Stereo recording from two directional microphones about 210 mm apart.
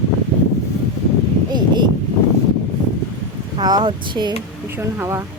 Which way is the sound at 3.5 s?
20° right (ahead or behind).